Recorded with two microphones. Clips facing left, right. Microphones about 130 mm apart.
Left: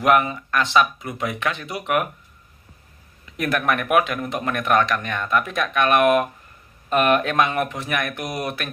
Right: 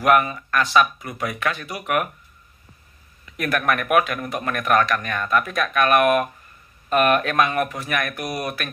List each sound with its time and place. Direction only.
0.0 s speech: 20° left (ahead or behind)
3.3 s speech: 20° left (ahead or behind)